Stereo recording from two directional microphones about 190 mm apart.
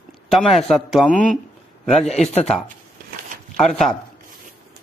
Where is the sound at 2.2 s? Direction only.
35° left (ahead or behind).